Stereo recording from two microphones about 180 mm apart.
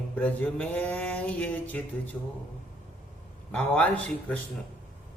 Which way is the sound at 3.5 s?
5° left (ahead or behind).